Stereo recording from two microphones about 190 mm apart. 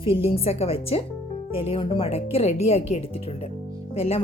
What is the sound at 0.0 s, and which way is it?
A woman's voice, 30° left (ahead or behind).